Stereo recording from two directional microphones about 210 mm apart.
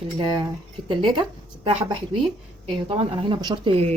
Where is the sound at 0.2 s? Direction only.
20° right (ahead or behind).